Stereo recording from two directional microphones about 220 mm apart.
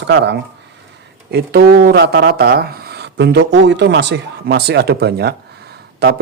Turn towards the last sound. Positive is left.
turn(degrees=-45)  # may be behind; listen again after turning